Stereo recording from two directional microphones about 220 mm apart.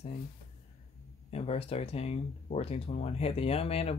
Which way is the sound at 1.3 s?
25° left (ahead or behind).